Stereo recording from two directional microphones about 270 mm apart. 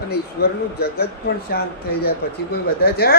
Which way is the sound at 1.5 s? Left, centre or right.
Left.